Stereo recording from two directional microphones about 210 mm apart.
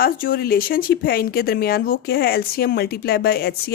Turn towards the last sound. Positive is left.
turn(degrees=45)  # may be behind; listen again after turning